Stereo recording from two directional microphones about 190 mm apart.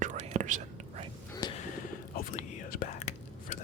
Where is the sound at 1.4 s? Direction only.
20° left (ahead or behind).